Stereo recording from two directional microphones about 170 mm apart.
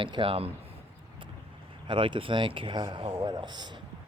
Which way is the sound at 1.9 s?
30° right (ahead or behind).